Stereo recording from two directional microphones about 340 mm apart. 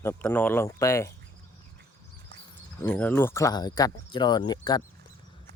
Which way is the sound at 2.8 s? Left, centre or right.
Centre.